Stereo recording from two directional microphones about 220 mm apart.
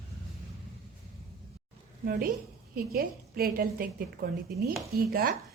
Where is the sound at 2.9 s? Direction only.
40° right (ahead or behind).